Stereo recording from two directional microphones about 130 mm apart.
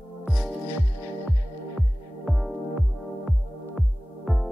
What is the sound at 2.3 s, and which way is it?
Music, centre (ahead or behind).